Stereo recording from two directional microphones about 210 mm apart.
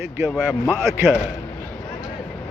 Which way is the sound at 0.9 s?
5° right (ahead or behind).